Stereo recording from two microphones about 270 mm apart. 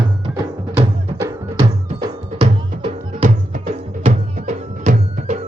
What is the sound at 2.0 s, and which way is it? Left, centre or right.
Music, centre.